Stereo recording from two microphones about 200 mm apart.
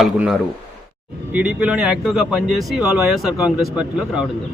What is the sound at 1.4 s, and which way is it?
Speech, 5° right (ahead or behind).